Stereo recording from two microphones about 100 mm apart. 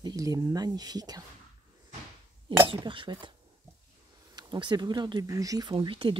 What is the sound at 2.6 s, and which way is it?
Speech, 60° right (ahead or behind).